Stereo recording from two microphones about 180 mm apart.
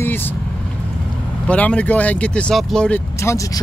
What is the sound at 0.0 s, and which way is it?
Vehicle, 10° left (ahead or behind).